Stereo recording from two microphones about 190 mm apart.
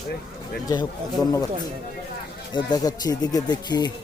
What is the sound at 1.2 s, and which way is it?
Speech, 20° left (ahead or behind).